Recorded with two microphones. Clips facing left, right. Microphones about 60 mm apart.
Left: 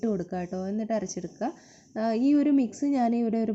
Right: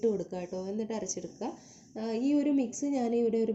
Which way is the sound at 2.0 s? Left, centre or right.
Left.